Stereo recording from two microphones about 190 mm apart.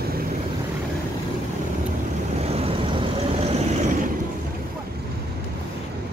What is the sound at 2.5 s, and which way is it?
Vehicle, 30° right (ahead or behind).